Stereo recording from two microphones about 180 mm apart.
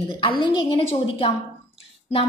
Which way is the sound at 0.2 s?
30° left (ahead or behind).